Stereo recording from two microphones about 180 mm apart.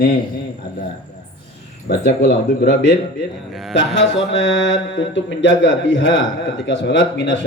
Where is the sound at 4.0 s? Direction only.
90° left.